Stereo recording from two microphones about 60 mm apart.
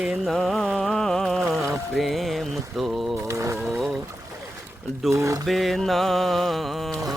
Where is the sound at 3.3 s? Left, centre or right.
Right.